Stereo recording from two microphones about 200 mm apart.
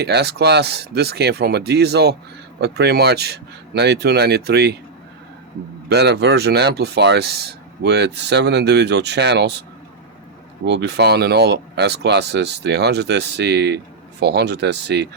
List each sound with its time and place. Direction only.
0.0 s speech: 55° right (ahead or behind)
5.9 s speech: 55° right (ahead or behind)
10.7 s speech: 60° right (ahead or behind)